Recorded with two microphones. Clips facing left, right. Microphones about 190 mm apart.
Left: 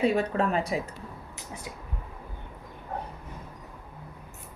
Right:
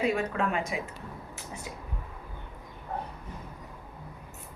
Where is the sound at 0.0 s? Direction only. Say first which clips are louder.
Left 3 dB; 35° left (ahead or behind).